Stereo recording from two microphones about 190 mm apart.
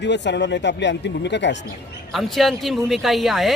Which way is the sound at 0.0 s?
65° left (ahead or behind).